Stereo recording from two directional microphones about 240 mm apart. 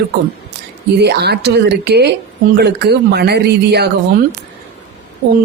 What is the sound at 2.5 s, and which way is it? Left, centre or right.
Speech, right.